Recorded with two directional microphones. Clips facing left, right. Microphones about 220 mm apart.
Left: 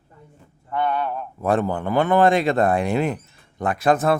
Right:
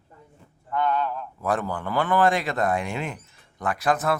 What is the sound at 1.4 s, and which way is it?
A man's voice, 25° left (ahead or behind).